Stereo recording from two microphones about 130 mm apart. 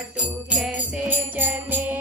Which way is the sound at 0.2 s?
10° right (ahead or behind).